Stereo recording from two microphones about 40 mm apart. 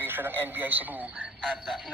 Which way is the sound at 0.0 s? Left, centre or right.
Right.